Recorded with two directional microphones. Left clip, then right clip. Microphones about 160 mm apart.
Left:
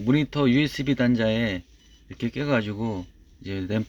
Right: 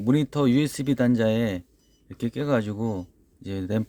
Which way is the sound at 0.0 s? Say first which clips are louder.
Even; 30° right (ahead or behind).